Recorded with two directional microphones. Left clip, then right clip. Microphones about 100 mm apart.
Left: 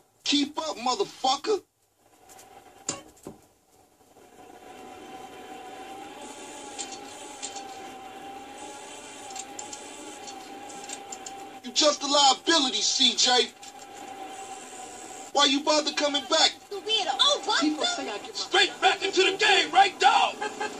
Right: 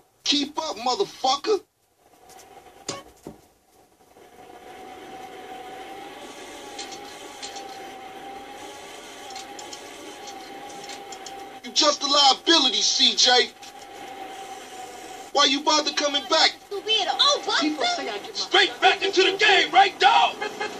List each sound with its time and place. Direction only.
0.3 s speech: 25° right (ahead or behind)
8.8 s a sound: 25° right (ahead or behind)
10.8 s speech: 20° right (ahead or behind)
15.3 s speech: 25° right (ahead or behind)